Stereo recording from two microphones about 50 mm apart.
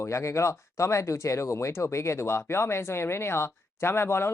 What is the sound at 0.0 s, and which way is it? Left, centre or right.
Speech, left.